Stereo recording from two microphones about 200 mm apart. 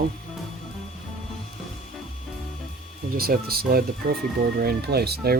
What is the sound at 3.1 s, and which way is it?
Speech, 50° right (ahead or behind).